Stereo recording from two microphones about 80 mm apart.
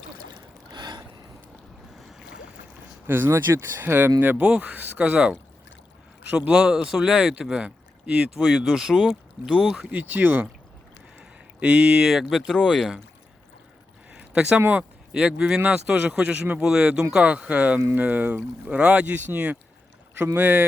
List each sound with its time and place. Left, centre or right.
0.7 s boat: right
3.1 s speech: right
8.4 s speech: centre
9.9 s speech: right
11.2 s speech: centre
14.1 s a sound: centre
14.6 s speech: right